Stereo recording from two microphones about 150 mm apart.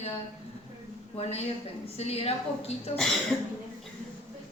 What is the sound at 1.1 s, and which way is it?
A woman's voice, 45° left (ahead or behind).